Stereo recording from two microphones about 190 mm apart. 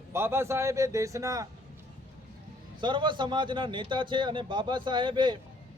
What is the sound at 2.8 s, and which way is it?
A man's voice, 25° right (ahead or behind).